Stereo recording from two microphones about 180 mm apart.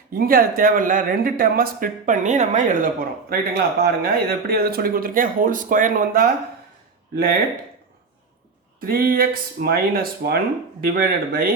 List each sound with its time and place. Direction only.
0.1 s speech: 55° right (ahead or behind)
8.8 s speech: 55° right (ahead or behind)